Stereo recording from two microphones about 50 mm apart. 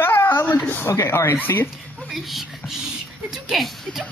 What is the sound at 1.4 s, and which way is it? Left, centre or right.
Speech, left.